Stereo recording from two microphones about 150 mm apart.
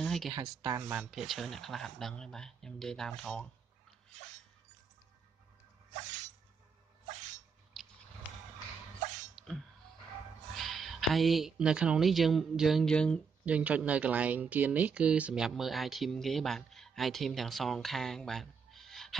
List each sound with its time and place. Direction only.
0.0 s a sound: centre (ahead or behind)
0.3 s speech: 25° right (ahead or behind)
0.9 s speech: centre (ahead or behind)
9.3 s sneeze: centre (ahead or behind)
10.5 s speech: centre (ahead or behind)
13.5 s speech: 10° right (ahead or behind)